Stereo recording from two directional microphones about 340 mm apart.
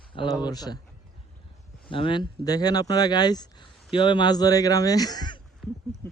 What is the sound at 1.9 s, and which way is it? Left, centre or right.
Speech, centre.